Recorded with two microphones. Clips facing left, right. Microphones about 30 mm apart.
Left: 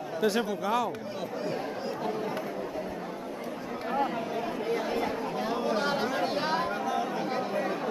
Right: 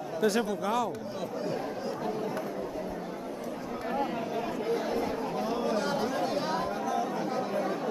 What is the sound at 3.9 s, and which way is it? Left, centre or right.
Chatter, centre.